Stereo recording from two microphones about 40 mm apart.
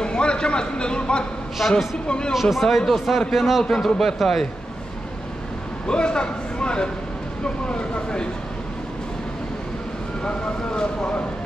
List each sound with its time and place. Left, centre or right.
0.0 s a man's voice: left
1.6 s speech: centre
2.0 s speech: left
2.5 s a man's voice: centre
3.3 s speech: centre
5.9 s speech: left
10.2 s speech: left